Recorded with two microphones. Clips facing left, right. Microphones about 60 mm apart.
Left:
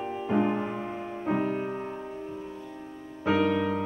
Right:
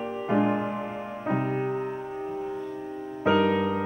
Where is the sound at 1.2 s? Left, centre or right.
Right.